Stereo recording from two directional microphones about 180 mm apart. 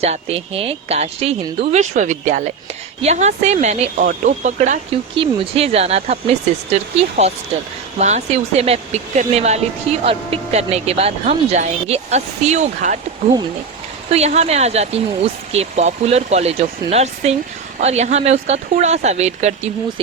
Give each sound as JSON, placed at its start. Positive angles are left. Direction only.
{"t": 0.0, "sound": "speech", "side_deg": -35}
{"t": 5.1, "sound": "speech", "side_deg": -30}
{"t": 14.1, "sound": "speech", "side_deg": -35}